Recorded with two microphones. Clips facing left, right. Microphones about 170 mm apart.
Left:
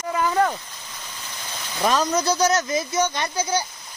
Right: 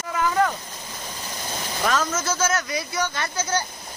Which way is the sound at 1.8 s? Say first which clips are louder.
Left 4 dB; 15° left (ahead or behind).